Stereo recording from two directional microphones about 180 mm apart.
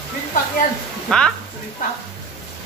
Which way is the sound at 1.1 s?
5° left (ahead or behind).